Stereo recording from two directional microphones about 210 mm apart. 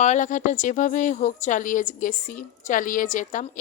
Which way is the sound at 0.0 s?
35° left (ahead or behind).